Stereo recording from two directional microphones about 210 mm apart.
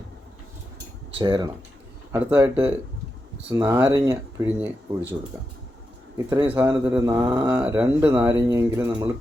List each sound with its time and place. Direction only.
1.2 s speech: 20° right (ahead or behind)
6.1 s speech: 10° right (ahead or behind)